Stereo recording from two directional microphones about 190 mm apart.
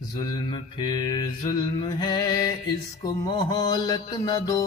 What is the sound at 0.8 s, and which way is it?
Mantra, 20° left (ahead or behind).